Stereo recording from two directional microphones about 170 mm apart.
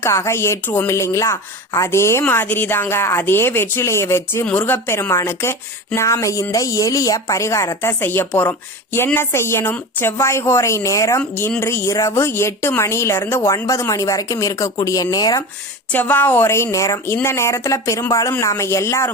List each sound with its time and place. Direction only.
0.0 s speech: 15° left (ahead or behind)
15.9 s speech: 10° left (ahead or behind)